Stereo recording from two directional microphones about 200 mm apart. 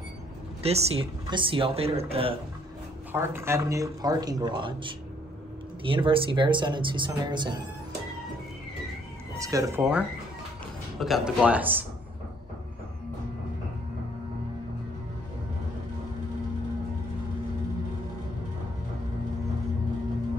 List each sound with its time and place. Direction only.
0.6 s a man's voice: 30° right (ahead or behind)
3.1 s a man's voice: 10° right (ahead or behind)
9.4 s speech: 15° right (ahead or behind)
9.8 s speech: 5° right (ahead or behind)